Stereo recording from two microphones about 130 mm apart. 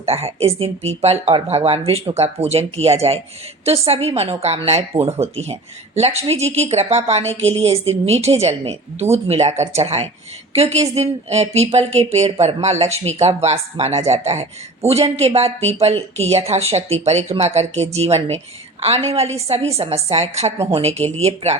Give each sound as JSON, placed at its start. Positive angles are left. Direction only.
{"t": 0.0, "sound": "speech", "side_deg": -50}